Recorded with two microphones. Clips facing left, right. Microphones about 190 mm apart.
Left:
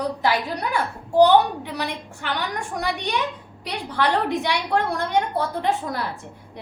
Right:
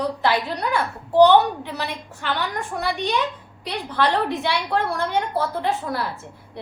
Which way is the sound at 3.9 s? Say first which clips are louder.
Even; 10° left (ahead or behind).